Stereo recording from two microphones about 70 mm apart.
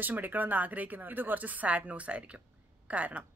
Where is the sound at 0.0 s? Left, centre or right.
Right.